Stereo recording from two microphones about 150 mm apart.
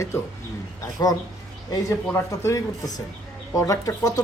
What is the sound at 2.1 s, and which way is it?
Speech, 20° left (ahead or behind).